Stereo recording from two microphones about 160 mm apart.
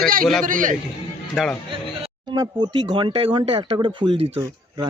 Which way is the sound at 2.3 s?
25° right (ahead or behind).